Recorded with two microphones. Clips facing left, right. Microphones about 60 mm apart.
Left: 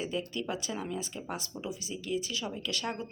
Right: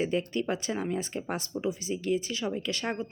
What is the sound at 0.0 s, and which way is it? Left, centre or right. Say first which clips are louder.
A woman's voice: right 6 dB; right.